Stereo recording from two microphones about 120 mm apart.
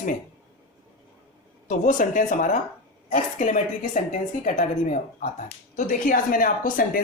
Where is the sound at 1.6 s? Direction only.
90° left.